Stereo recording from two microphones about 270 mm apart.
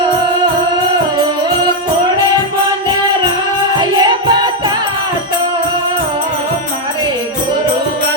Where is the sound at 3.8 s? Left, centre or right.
Centre.